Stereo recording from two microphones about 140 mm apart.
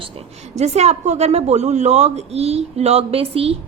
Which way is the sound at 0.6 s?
50° right (ahead or behind).